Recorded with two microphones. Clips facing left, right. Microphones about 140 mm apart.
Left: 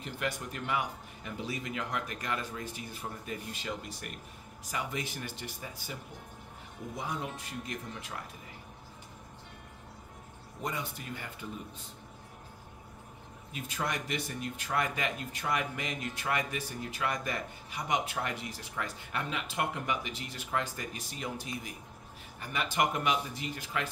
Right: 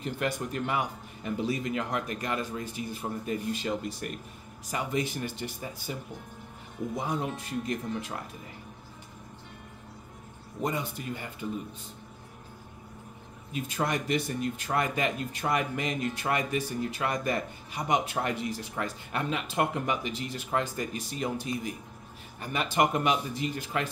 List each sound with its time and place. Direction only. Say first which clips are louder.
0.0 s speech: right 5 dB; 35° right (ahead or behind); by 3.1 s 15° right (ahead or behind)
3.3 s speech: right 9 dB; 30° right (ahead or behind)
10.6 s speech: right 6 dB; 20° right (ahead or behind)
13.8 s speech: right 6 dB; 25° right (ahead or behind)